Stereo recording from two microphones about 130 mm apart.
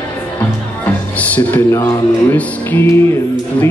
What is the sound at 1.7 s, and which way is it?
Speech, 25° left (ahead or behind).